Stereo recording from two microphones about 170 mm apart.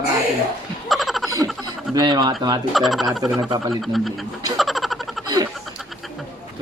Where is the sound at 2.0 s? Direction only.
25° right (ahead or behind).